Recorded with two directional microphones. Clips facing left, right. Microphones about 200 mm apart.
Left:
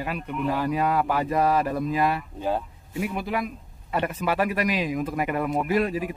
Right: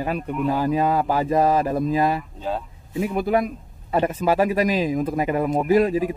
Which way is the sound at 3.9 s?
30° right (ahead or behind).